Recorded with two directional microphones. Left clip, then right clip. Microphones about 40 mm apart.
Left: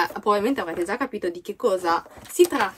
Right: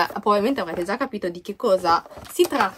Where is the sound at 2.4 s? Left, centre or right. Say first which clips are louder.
Right 3 dB; right.